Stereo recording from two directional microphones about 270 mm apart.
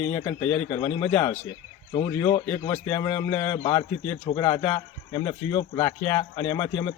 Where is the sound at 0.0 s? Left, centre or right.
Centre.